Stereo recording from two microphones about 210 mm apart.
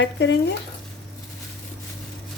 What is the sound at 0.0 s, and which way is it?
Stir, 55° left (ahead or behind).